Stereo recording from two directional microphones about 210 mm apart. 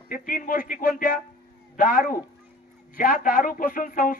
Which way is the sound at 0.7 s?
40° left (ahead or behind).